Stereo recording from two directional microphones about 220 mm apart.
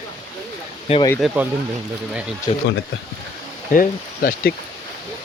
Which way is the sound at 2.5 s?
25° left (ahead or behind).